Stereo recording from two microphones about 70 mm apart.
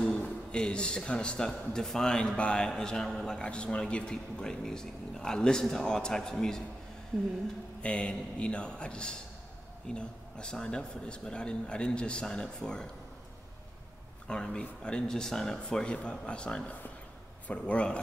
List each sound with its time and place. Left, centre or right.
0.0 s speech: centre
7.8 s speech: centre
14.2 s speech: centre